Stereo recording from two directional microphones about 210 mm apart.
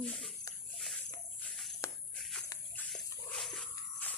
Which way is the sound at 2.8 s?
Centre (ahead or behind).